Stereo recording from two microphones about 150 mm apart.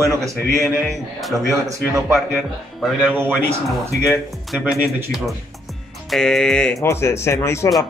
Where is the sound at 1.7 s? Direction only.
20° right (ahead or behind).